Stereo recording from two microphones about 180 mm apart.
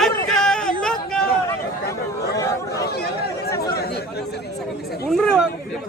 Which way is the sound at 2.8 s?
60° left (ahead or behind).